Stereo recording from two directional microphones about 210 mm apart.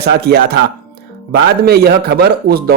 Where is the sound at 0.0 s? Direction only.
50° right (ahead or behind).